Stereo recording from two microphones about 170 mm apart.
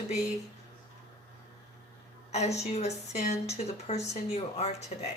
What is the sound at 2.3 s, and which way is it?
A woman's voice, 40° left (ahead or behind).